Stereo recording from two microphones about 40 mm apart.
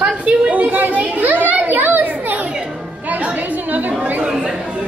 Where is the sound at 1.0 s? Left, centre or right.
Right.